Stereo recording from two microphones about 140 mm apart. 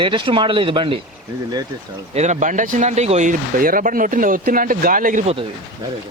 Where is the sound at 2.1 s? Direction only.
55° right (ahead or behind).